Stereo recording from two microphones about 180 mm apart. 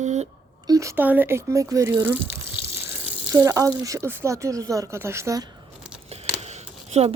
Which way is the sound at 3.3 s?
15° right (ahead or behind).